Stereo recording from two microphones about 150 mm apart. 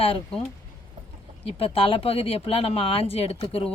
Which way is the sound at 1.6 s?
40° left (ahead or behind).